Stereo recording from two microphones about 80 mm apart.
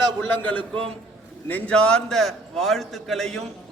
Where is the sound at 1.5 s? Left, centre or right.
Left.